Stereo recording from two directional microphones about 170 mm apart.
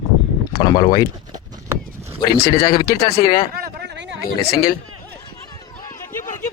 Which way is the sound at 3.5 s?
75° right (ahead or behind).